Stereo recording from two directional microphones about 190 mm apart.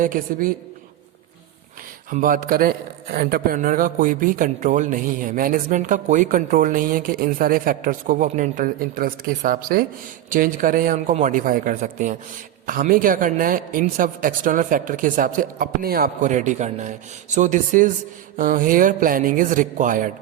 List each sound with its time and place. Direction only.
0.0 s a man's voice: 45° right (ahead or behind)
2.0 s a man's voice: 45° right (ahead or behind)